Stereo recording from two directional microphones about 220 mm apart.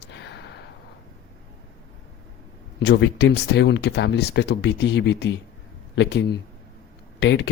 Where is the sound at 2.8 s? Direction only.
50° left (ahead or behind).